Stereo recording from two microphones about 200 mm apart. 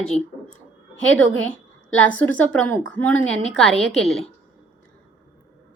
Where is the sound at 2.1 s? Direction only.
5° left (ahead or behind).